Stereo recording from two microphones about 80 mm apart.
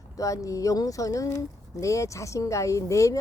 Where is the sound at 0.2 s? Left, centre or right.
Left.